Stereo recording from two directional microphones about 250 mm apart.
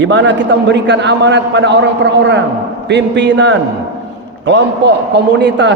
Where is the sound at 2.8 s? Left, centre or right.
Right.